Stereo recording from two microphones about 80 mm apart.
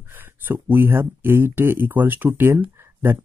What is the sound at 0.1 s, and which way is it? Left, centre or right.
Speech, right.